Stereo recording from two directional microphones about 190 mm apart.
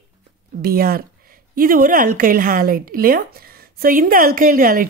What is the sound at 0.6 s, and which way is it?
Speech, 50° right (ahead or behind).